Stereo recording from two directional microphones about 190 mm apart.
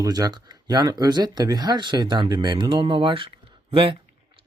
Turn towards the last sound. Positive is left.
turn(degrees=-30)  # may be behind; listen again after turning